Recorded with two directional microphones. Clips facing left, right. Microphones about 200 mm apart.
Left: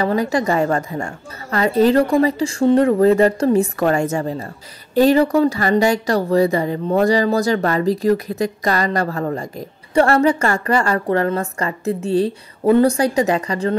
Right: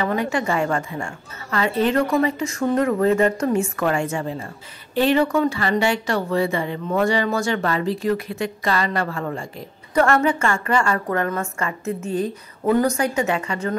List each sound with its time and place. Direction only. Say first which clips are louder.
0.0 s a woman's voice: left 4 dB; 35° left (ahead or behind)